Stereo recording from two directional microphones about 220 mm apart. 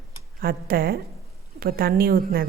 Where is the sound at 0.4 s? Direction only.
45° right (ahead or behind).